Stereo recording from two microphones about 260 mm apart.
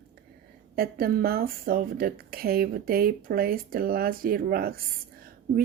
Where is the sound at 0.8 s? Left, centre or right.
Right.